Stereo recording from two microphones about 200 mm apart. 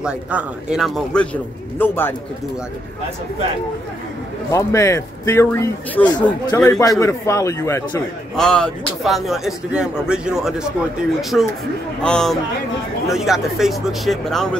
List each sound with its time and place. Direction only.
0.0 s a man's voice: 5° right (ahead or behind); by 2.1 s 10° left (ahead or behind)
4.5 s speech: 15° left (ahead or behind)
6.0 s a man's voice: 20° left (ahead or behind)
8.4 s a man's voice: 5° left (ahead or behind)